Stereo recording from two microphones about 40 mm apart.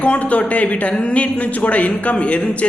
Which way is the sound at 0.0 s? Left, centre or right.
Left.